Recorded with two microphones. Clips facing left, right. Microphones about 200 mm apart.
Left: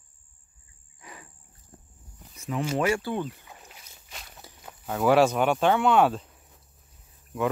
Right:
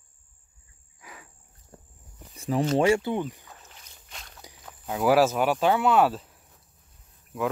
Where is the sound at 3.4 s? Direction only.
15° left (ahead or behind).